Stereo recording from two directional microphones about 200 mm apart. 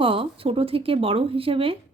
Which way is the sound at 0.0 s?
25° right (ahead or behind).